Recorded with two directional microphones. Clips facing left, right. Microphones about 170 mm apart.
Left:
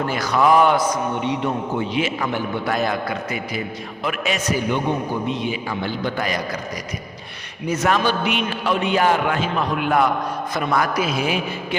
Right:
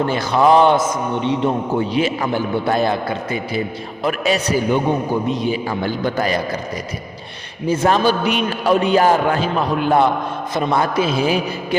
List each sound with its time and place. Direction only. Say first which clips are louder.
0.0 s a man's voice: right 3 dB; 30° right (ahead or behind)
7.7 s a man's voice: right 4 dB; 30° right (ahead or behind)